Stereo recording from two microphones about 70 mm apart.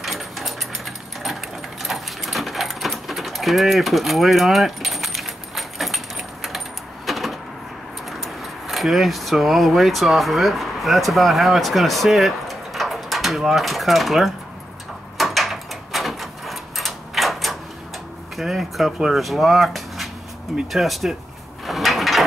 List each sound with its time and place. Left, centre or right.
0.0 s sewing machine: centre
7.1 s a sound: centre
8.2 s speech: centre
15.1 s door: centre
18.3 s speech: centre
21.6 s a sound: centre